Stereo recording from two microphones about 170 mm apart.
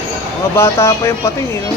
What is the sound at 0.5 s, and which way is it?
Speech, 15° left (ahead or behind).